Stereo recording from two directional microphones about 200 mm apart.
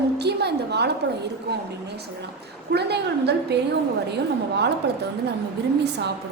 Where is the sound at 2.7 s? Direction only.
55° right (ahead or behind).